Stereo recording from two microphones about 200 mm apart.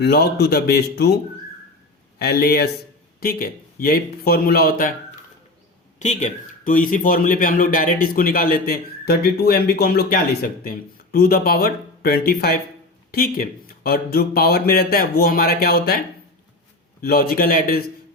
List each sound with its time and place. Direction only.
0.0 s a man's voice: 55° left (ahead or behind)
2.1 s a man's voice: 50° left (ahead or behind)
6.0 s a man's voice: 35° left (ahead or behind)
17.0 s a man's voice: 50° left (ahead or behind)